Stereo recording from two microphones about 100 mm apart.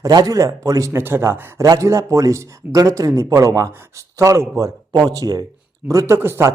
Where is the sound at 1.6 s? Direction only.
35° right (ahead or behind).